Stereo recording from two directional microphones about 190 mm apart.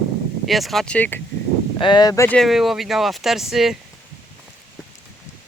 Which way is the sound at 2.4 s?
Centre (ahead or behind).